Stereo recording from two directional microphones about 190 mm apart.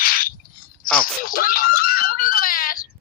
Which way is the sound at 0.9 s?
50° left (ahead or behind).